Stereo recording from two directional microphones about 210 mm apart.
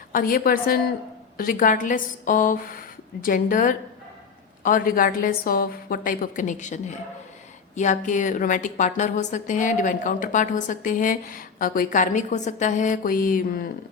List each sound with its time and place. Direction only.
0.1 s a woman's voice: 40° left (ahead or behind)